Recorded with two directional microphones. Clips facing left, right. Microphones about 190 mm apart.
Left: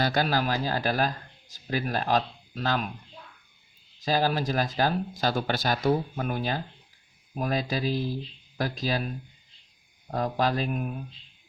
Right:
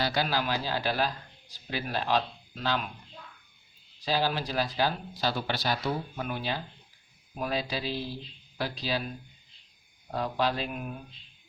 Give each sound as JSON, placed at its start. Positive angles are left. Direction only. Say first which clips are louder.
{"t": 0.0, "sound": "a man's voice", "louder": "left 3 dB", "side_deg": 45}
{"t": 4.0, "sound": "speech", "louder": "left 3 dB", "side_deg": 45}
{"t": 10.1, "sound": "speech", "louder": "left 3 dB", "side_deg": 45}